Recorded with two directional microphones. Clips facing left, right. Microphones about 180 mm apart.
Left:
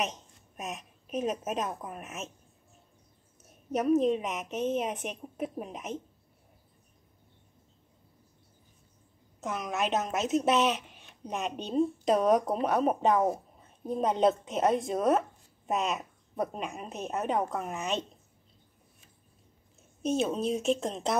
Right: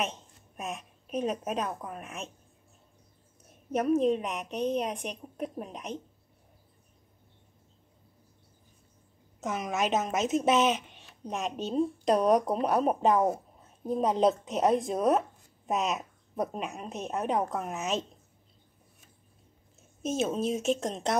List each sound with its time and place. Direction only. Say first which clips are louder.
0.0 s a woman's voice: even; centre (ahead or behind)
3.3 s speech: right 1 dB; centre (ahead or behind)
9.4 s speech: right 2 dB; centre (ahead or behind)
20.0 s speech: left 1 dB; centre (ahead or behind)